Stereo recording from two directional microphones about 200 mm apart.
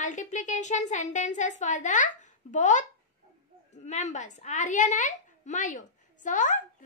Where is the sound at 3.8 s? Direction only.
35° left (ahead or behind).